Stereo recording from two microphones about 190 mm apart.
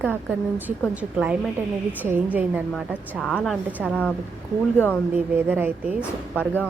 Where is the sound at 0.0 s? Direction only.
10° right (ahead or behind).